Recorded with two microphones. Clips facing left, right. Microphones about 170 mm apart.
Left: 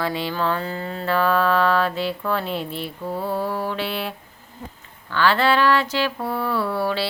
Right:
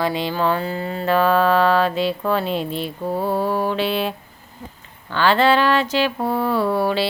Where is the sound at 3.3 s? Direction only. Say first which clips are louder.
Right 4 dB; 15° right (ahead or behind).